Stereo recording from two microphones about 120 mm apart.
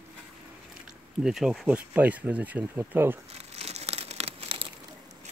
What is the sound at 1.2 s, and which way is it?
Speech, 5° right (ahead or behind).